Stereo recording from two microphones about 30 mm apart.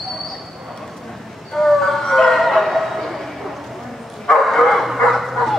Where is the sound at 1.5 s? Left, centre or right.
Centre.